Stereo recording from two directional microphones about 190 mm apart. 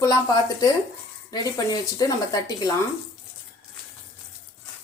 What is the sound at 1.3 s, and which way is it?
Speech, 20° left (ahead or behind).